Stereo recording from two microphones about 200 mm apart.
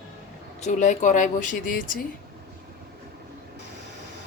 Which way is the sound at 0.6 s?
35° left (ahead or behind).